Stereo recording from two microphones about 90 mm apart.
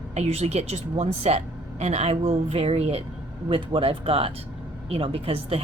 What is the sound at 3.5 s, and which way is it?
Speech, 90° right.